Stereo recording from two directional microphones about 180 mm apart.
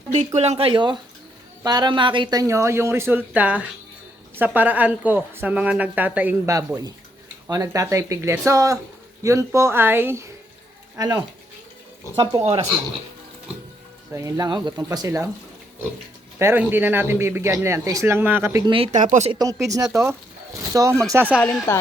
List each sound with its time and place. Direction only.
0.3 s speech: 35° right (ahead or behind)
12.4 s speech: 35° right (ahead or behind)
14.1 s speech: 15° right (ahead or behind)
16.4 s speech: 10° right (ahead or behind)
18.7 s speech: 35° right (ahead or behind)
19.4 s speech: 20° right (ahead or behind)
21.4 s speech: 10° left (ahead or behind)